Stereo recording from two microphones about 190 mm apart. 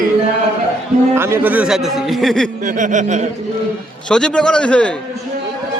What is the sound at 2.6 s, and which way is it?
Chuckle, 40° right (ahead or behind).